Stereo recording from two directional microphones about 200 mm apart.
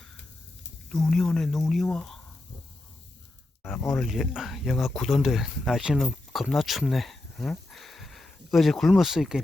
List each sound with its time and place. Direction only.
0.9 s speech: 5° left (ahead or behind)
3.6 s speech: centre (ahead or behind)
7.7 s a sound: centre (ahead or behind)